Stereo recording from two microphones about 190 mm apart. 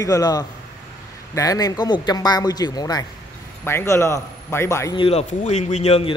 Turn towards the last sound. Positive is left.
turn(degrees=30)  # may be behind; listen again after turning